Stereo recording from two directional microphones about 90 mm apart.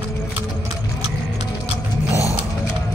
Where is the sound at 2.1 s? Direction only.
35° right (ahead or behind).